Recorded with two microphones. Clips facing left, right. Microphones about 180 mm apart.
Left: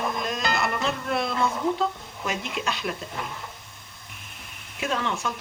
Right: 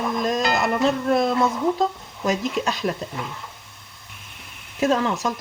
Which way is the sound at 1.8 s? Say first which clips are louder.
Right 5 dB; 40° right (ahead or behind).